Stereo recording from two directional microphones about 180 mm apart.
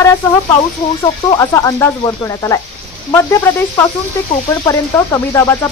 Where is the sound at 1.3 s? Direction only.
20° left (ahead or behind).